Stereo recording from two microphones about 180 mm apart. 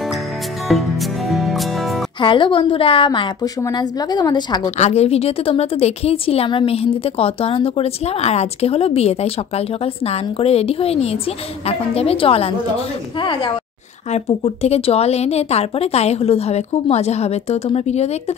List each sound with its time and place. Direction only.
1.3 s music: centre (ahead or behind)
2.2 s a woman's voice: 30° left (ahead or behind)
4.7 s a woman's voice: 35° left (ahead or behind)